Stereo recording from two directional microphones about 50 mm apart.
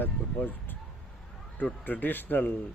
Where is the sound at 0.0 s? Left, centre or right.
Left.